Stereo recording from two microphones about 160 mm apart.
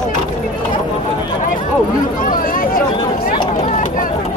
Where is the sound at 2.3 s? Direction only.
60° left (ahead or behind).